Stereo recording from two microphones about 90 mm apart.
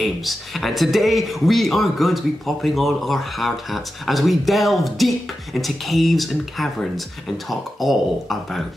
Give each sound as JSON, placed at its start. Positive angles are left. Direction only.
{"t": 0.0, "sound": "a man's voice", "side_deg": 0}